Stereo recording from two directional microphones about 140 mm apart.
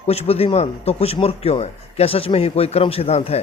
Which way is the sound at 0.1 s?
45° left (ahead or behind).